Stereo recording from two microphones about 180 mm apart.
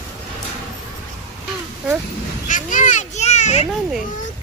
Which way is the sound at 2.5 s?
45° left (ahead or behind).